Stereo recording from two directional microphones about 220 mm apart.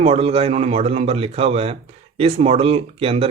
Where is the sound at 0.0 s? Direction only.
25° right (ahead or behind).